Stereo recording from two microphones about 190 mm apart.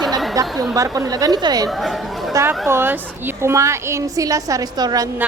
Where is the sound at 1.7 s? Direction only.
Centre (ahead or behind).